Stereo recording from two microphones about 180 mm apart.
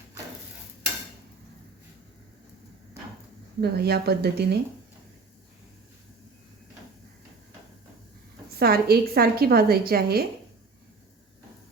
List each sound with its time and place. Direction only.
3.6 s a woman's voice: 60° right (ahead or behind)
8.5 s a woman's voice: 60° right (ahead or behind)